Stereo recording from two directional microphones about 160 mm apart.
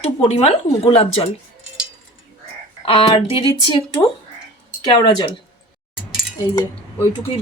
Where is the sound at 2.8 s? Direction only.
35° left (ahead or behind).